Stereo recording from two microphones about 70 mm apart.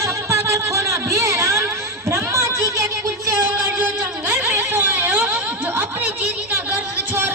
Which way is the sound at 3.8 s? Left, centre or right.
Right.